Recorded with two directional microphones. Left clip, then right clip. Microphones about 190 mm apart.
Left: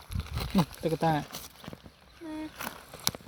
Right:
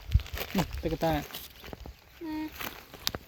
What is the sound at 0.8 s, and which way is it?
Speech, 10° left (ahead or behind).